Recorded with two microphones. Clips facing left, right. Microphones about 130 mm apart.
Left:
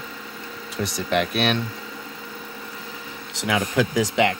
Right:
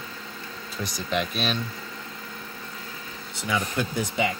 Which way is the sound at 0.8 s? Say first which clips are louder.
Left 5 dB; 65° left (ahead or behind).